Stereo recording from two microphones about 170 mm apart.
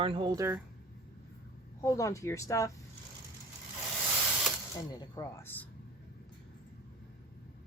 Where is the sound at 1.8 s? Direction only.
20° left (ahead or behind).